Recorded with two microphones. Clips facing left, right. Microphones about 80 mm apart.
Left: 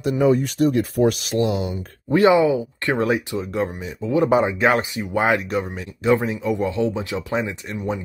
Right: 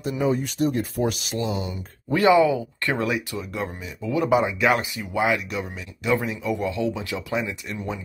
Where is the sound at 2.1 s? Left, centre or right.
Left.